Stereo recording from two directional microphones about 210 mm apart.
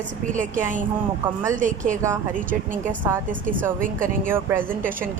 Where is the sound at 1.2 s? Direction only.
10° right (ahead or behind).